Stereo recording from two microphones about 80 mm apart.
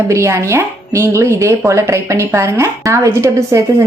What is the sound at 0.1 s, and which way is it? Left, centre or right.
Speech, right.